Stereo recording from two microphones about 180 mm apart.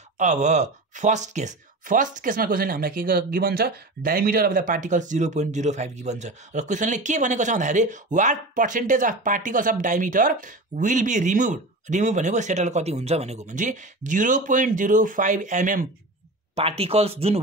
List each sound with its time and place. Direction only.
0.2 s speech: 40° right (ahead or behind)
16.5 s speech: 35° right (ahead or behind)